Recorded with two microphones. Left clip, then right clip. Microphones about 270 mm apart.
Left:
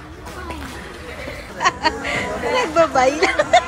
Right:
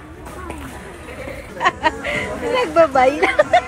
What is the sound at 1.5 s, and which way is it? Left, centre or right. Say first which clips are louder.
Speech: right 1 dB; centre.